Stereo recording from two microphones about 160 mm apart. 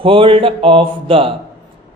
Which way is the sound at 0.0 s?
35° right (ahead or behind).